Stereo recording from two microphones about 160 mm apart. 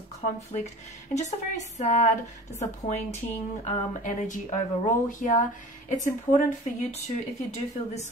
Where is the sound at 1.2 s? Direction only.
45° left (ahead or behind).